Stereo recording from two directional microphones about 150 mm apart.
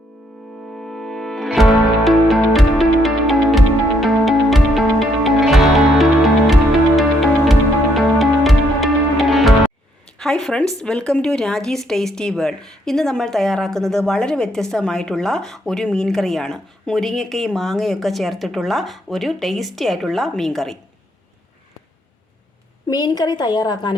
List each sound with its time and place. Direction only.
0.7 s music: centre (ahead or behind)
10.2 s a sound: 5° left (ahead or behind)
10.8 s speech: 5° left (ahead or behind)
22.9 s a woman's voice: 25° left (ahead or behind)